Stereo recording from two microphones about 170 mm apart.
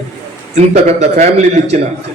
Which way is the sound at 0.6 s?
40° right (ahead or behind).